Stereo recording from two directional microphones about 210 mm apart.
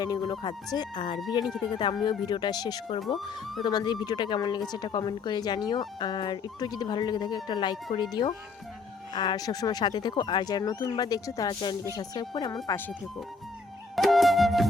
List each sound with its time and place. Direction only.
0.0 s speech: 20° left (ahead or behind)
13.9 s flute: centre (ahead or behind)